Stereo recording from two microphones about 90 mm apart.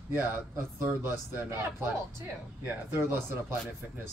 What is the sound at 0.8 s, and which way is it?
A man's voice, 25° right (ahead or behind).